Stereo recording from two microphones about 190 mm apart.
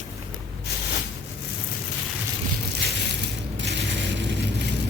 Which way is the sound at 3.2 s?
60° right (ahead or behind).